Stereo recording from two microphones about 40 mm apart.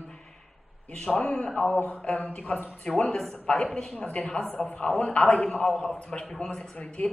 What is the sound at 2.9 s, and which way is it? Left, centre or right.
Speech, left.